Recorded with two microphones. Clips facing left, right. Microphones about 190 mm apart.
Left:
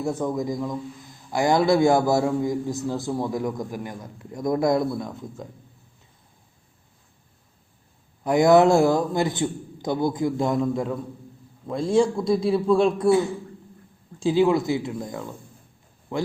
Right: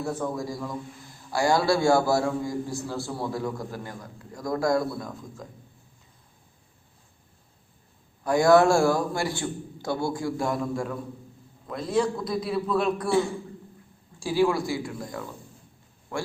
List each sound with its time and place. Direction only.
0.0 s a man's voice: 20° left (ahead or behind)
8.2 s a man's voice: 20° left (ahead or behind)
14.2 s a man's voice: 20° left (ahead or behind)